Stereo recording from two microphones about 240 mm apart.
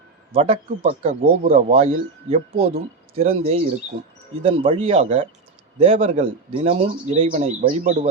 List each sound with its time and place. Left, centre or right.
0.3 s speech: right